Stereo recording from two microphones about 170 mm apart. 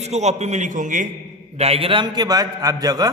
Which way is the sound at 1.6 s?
35° right (ahead or behind).